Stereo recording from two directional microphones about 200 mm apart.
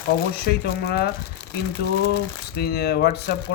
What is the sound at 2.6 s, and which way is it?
Speech, 50° left (ahead or behind).